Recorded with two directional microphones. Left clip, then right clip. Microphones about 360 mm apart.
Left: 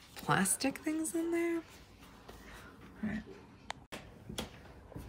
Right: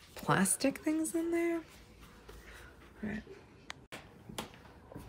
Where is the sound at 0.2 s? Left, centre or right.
Centre.